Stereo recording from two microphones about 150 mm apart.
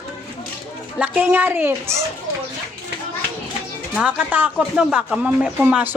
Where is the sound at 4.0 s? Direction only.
10° right (ahead or behind).